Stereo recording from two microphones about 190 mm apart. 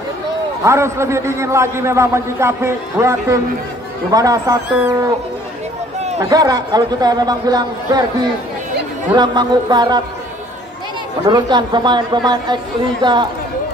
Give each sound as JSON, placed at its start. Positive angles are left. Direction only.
{"t": 0.7, "sound": "a man's voice", "side_deg": -15}
{"t": 6.1, "sound": "a man's voice", "side_deg": -20}
{"t": 11.2, "sound": "a man's voice", "side_deg": -25}